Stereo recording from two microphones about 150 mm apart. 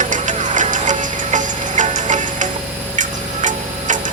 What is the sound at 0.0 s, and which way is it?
Music, 55° right (ahead or behind).